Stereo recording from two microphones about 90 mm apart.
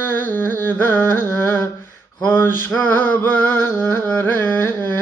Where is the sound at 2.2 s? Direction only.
25° left (ahead or behind).